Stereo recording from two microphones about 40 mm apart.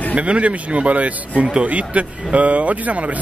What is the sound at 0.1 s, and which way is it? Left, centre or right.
Speech, right.